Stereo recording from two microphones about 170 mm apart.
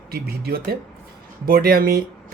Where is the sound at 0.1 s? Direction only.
65° right (ahead or behind).